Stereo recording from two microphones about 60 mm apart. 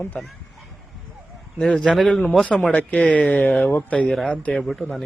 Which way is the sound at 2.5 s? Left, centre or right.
Left.